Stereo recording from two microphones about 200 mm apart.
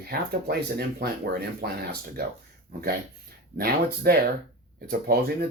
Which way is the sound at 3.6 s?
50° right (ahead or behind).